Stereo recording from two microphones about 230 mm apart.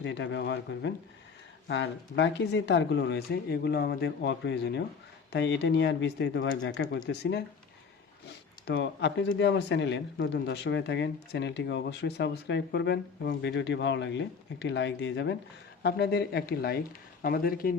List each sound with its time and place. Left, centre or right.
0.0 s speech: left
8.6 s speech: left